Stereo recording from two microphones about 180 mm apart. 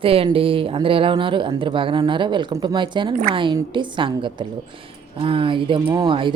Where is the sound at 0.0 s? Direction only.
30° right (ahead or behind).